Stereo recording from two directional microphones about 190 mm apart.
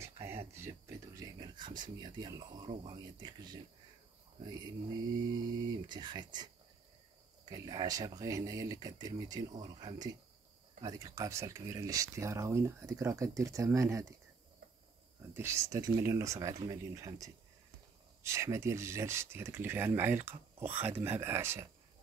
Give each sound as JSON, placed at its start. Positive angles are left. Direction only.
{"t": 0.0, "sound": "a sound", "side_deg": -15}
{"t": 0.8, "sound": "speech", "side_deg": -20}
{"t": 15.3, "sound": "speech", "side_deg": -15}